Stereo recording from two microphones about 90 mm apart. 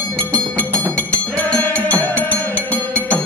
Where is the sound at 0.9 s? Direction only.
15° left (ahead or behind).